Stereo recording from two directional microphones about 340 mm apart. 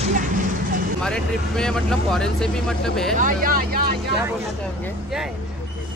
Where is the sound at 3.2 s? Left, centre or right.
Right.